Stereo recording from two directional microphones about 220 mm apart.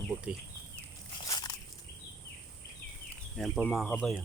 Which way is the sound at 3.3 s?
Centre (ahead or behind).